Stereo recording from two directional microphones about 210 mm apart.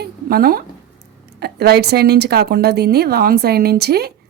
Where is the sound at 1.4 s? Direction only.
50° right (ahead or behind).